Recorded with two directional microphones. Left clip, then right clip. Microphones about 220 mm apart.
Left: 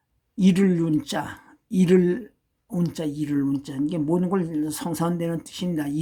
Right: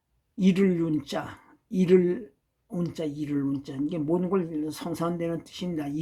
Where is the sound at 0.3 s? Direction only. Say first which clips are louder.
Left 2 dB; 15° left (ahead or behind).